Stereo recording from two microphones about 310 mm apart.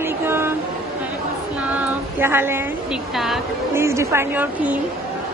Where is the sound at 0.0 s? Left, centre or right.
Centre.